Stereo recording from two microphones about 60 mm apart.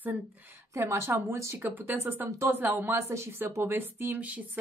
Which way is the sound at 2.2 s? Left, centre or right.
Right.